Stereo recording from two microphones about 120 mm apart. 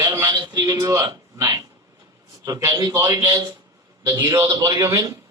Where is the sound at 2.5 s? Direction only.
25° right (ahead or behind).